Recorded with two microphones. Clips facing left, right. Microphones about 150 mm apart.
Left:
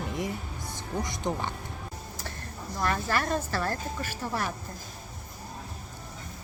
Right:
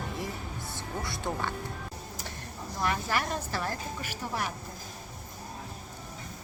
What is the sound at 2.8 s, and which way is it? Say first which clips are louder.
A woman's voice: left 2 dB; 15° right (ahead or behind).